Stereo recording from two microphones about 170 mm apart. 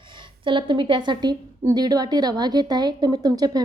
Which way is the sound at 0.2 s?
30° right (ahead or behind).